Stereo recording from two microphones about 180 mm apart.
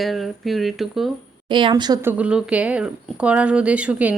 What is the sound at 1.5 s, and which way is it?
Speech, 25° right (ahead or behind).